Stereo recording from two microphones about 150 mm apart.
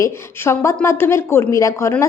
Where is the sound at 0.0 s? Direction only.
15° left (ahead or behind).